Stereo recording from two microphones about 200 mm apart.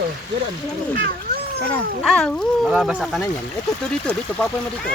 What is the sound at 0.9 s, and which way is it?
Speech, 50° right (ahead or behind).